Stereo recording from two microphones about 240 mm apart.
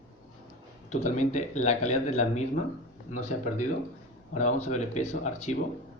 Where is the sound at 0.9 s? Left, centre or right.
Left.